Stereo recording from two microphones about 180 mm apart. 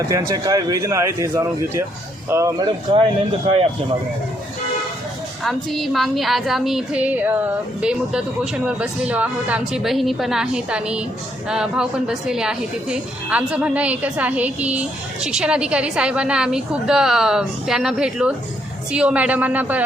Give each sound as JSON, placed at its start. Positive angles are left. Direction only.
{"t": 0.0, "sound": "speech", "side_deg": -20}
{"t": 5.4, "sound": "speech", "side_deg": 0}